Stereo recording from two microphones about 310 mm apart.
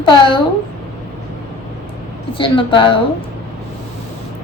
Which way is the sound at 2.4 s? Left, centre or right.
Centre.